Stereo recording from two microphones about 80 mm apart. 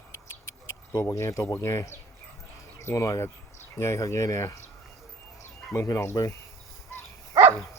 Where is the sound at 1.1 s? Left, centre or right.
Left.